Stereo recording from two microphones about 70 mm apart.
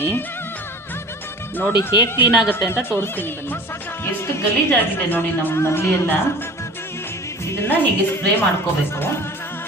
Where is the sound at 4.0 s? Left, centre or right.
Left.